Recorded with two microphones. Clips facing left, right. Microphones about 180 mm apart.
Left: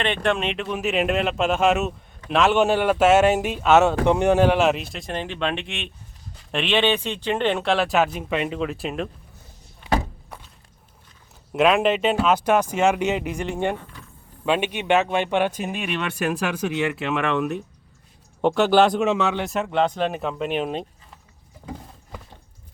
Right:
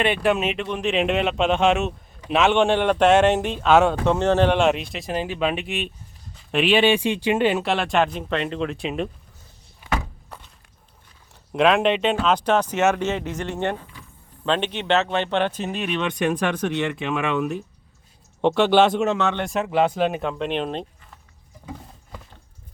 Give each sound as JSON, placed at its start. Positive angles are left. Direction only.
{"t": 0.0, "sound": "speech", "side_deg": -5}
{"t": 11.5, "sound": "speech", "side_deg": 5}